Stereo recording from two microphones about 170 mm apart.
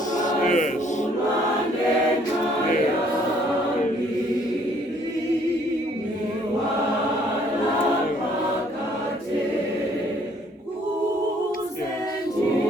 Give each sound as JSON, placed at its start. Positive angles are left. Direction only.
{"t": 0.2, "sound": "choir", "side_deg": 50}